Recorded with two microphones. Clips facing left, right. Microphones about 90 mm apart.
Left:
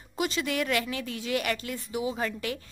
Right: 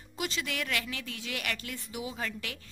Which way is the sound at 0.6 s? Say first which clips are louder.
Left 6 dB; 25° left (ahead or behind).